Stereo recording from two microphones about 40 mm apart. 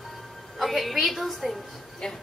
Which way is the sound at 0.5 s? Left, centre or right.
Centre.